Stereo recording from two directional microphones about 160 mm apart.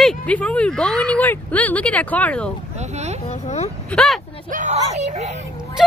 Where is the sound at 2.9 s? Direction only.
45° right (ahead or behind).